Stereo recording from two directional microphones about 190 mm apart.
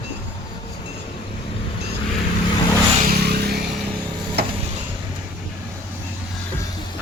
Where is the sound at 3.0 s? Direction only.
60° right (ahead or behind).